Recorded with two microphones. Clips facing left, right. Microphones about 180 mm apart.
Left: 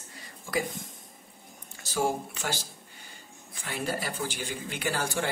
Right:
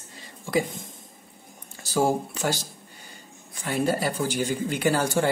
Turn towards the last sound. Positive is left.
turn(degrees=-40)  # may be behind; listen again after turning